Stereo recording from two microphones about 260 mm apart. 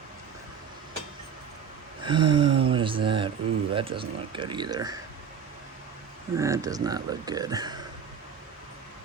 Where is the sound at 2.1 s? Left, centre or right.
Centre.